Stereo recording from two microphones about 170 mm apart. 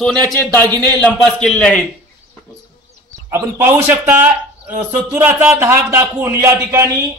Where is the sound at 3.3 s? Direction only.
15° right (ahead or behind).